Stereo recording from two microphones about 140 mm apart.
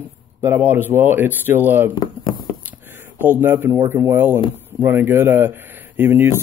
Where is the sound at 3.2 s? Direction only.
15° right (ahead or behind).